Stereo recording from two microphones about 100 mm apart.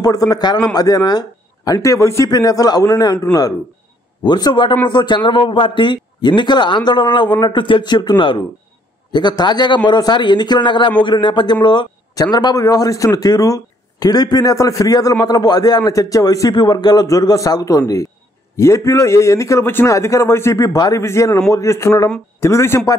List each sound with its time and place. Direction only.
0.0 s a man's voice: 40° left (ahead or behind)
21.0 s a man's voice: 25° left (ahead or behind)